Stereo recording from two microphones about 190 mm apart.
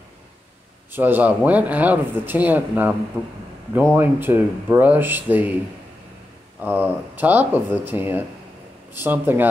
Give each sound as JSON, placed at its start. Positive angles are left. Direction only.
{"t": 0.9, "sound": "speech", "side_deg": -10}
{"t": 6.6, "sound": "speech", "side_deg": -10}